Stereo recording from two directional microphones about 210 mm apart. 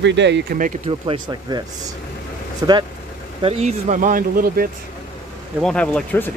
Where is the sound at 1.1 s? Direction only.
20° right (ahead or behind).